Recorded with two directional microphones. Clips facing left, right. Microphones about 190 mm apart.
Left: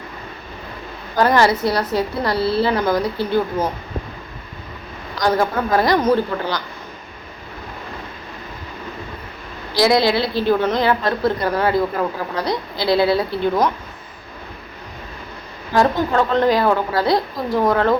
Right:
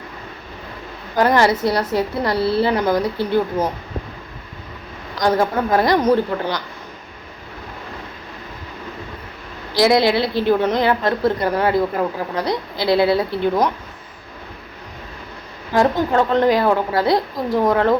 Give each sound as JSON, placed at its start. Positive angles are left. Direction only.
{"t": 1.1, "sound": "a woman's voice", "side_deg": -20}
{"t": 5.2, "sound": "a woman's voice", "side_deg": -25}
{"t": 9.7, "sound": "a woman's voice", "side_deg": -20}
{"t": 15.7, "sound": "a woman's voice", "side_deg": -20}